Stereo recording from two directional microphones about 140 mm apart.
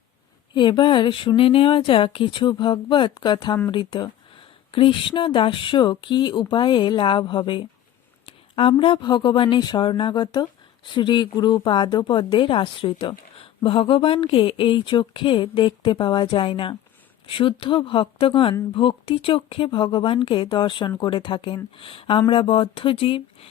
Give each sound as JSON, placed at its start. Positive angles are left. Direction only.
{"t": 0.5, "sound": "a woman's voice", "side_deg": 35}